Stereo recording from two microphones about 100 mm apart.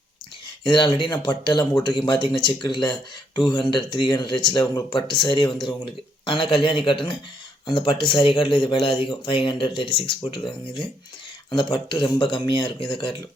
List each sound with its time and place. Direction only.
0.6 s speech: 50° left (ahead or behind)